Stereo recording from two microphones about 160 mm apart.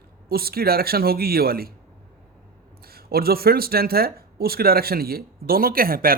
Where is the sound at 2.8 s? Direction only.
70° right (ahead or behind).